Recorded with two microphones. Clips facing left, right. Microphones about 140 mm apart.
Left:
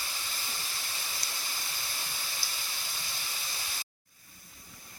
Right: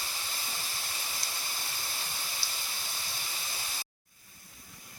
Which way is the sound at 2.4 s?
25° right (ahead or behind).